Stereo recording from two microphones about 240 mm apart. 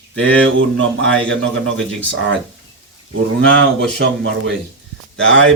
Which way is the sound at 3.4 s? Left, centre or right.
Right.